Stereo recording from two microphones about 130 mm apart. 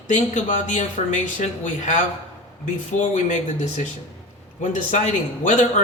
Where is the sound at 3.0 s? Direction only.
70° left (ahead or behind).